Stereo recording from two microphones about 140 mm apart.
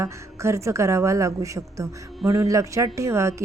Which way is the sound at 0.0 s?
20° right (ahead or behind).